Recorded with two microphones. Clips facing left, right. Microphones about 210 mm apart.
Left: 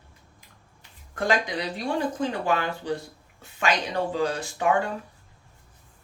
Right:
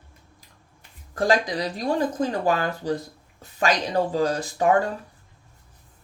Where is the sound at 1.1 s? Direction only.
35° right (ahead or behind).